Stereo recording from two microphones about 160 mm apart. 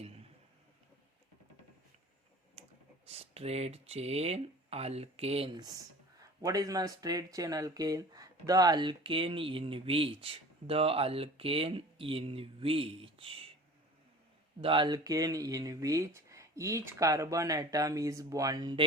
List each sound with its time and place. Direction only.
2.6 s clicking: 40° right (ahead or behind)
3.1 s speech: 40° right (ahead or behind)
5.5 s speech: 25° right (ahead or behind)
14.6 s speech: 30° right (ahead or behind)